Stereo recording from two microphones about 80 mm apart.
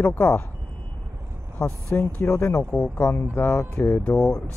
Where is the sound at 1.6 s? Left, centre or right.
Centre.